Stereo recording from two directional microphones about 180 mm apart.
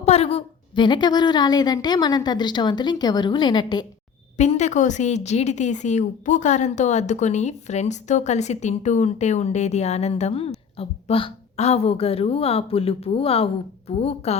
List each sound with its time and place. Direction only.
0.0 s a woman's voice: 35° left (ahead or behind)
4.4 s a woman's voice: 40° left (ahead or behind)